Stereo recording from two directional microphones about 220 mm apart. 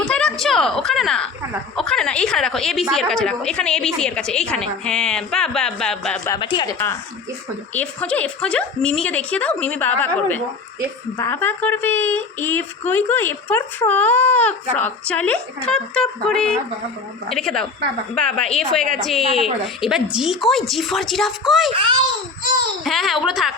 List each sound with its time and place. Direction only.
0.0 s a sound: 5° left (ahead or behind)
1.7 s a woman's voice: centre (ahead or behind)
6.2 s speech: 20° left (ahead or behind)
7.7 s a woman's voice: 5° left (ahead or behind)
22.8 s a woman's voice: centre (ahead or behind)